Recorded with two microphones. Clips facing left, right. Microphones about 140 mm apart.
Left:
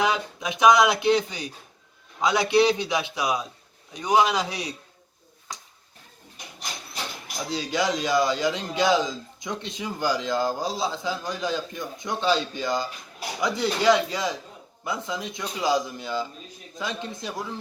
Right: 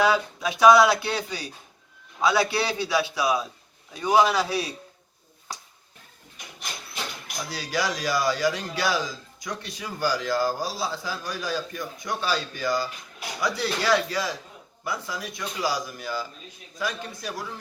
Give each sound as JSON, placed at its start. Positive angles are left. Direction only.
{"t": 0.0, "sound": "speech", "side_deg": 20}
{"t": 6.3, "sound": "a sound", "side_deg": 40}
{"t": 7.4, "sound": "speech", "side_deg": 20}